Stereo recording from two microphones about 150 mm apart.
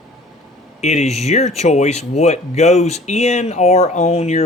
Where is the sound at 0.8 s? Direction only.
50° left (ahead or behind).